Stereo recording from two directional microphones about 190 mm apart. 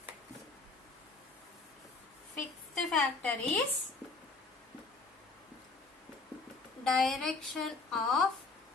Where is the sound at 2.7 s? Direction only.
5° left (ahead or behind).